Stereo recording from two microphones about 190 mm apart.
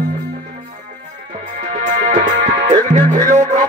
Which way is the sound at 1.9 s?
40° right (ahead or behind).